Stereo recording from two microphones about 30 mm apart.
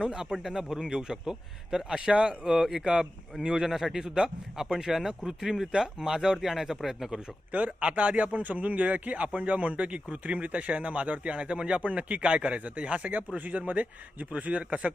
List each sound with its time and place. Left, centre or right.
0.0 s a man's voice: right
0.4 s speech: centre
0.8 s a man's voice: right
2.4 s speech: centre
2.8 s a man's voice: right
4.9 s speech: centre
7.8 s speech: right
11.3 s speech: right
11.8 s speech: right
12.2 s speech: right
12.5 s speech: right
13.1 s speech: right
14.3 s speech: right